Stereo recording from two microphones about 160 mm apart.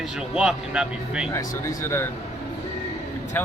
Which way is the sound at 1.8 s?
15° left (ahead or behind).